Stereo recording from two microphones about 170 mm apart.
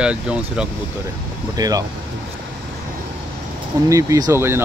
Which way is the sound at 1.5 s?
20° right (ahead or behind).